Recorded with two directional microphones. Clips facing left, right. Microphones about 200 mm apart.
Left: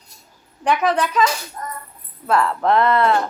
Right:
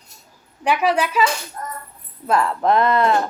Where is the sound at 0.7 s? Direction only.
10° right (ahead or behind).